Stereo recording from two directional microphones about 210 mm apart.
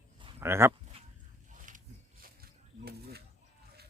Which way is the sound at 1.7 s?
35° right (ahead or behind).